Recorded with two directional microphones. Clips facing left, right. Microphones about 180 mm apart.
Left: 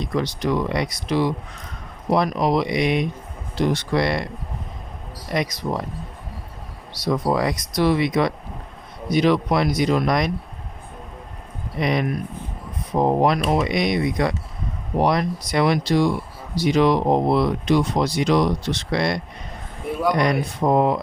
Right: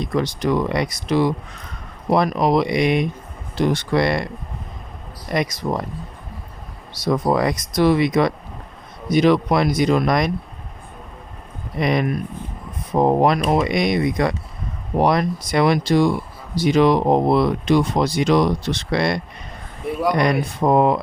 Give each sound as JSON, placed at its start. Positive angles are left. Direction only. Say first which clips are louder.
{"t": 0.0, "sound": "speech", "louder": "right 2 dB", "side_deg": -50}
{"t": 5.3, "sound": "speech", "louder": "right 2 dB", "side_deg": -50}
{"t": 6.9, "sound": "speech", "louder": "right 2 dB", "side_deg": -45}
{"t": 11.8, "sound": "speech", "louder": "right 2 dB", "side_deg": -50}